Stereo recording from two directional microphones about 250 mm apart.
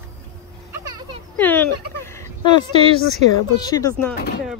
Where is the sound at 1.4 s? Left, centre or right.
Centre.